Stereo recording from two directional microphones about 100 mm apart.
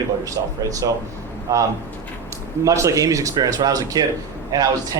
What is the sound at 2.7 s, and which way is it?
Speech, 35° right (ahead or behind).